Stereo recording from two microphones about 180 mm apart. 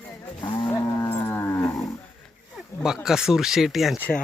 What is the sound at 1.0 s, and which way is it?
Moo, 15° left (ahead or behind).